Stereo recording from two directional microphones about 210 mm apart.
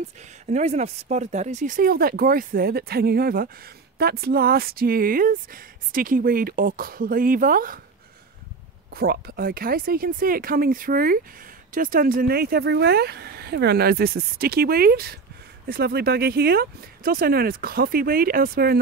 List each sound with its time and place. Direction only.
0.2 s speech: 35° right (ahead or behind)
8.9 s speech: 45° right (ahead or behind)